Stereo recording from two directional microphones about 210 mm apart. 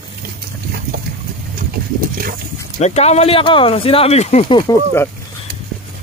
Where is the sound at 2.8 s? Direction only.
30° left (ahead or behind).